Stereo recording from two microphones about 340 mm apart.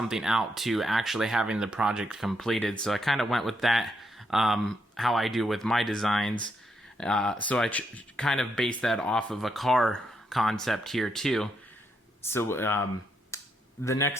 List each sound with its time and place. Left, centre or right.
0.0 s speech: centre
13.3 s finger snapping: centre
13.8 s speech: centre